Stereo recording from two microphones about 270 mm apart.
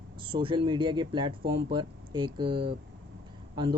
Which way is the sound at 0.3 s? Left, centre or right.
Centre.